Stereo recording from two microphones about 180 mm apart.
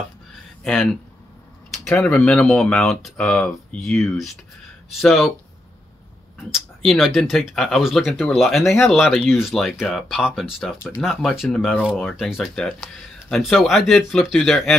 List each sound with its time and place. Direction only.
1.7 s speech: centre (ahead or behind)
6.5 s speech: centre (ahead or behind)